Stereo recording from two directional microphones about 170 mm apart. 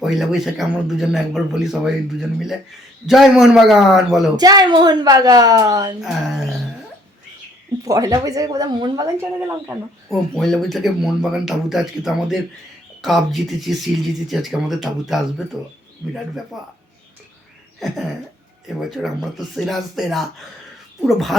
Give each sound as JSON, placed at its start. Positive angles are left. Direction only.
{"t": 0.0, "sound": "speech", "side_deg": 0}
{"t": 3.1, "sound": "speech", "side_deg": 0}
{"t": 4.4, "sound": "a woman's voice", "side_deg": -25}
{"t": 6.0, "sound": "speech", "side_deg": 0}
{"t": 7.9, "sound": "a woman's voice", "side_deg": -20}
{"t": 10.1, "sound": "speech", "side_deg": 0}
{"t": 17.7, "sound": "a sound", "side_deg": 0}
{"t": 18.8, "sound": "speech", "side_deg": 0}